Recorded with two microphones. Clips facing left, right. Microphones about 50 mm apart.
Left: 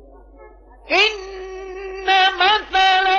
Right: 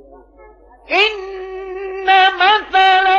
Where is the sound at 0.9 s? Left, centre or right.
Centre.